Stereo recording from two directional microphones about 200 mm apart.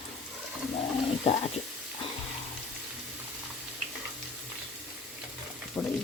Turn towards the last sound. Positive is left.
turn(degrees=10)  # may be behind; listen again after turning